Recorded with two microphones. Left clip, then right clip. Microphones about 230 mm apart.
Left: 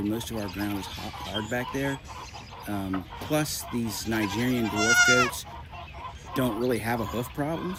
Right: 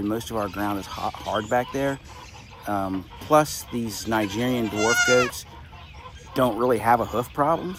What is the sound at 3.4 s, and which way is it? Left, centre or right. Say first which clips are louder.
Speech: right 2 dB; centre.